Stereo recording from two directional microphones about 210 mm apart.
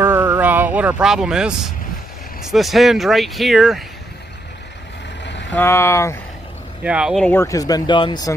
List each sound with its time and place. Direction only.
0.0 s a sound: 10° right (ahead or behind)
2.4 s speech: centre (ahead or behind)
5.2 s vehicle: 55° left (ahead or behind)
5.5 s speech: 10° left (ahead or behind)
6.8 s speech: 5° right (ahead or behind)
7.3 s speech: 15° left (ahead or behind)